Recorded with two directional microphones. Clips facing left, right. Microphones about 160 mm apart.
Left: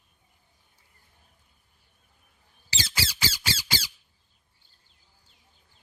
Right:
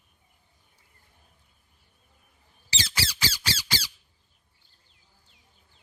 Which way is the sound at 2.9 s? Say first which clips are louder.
Even; 25° left (ahead or behind).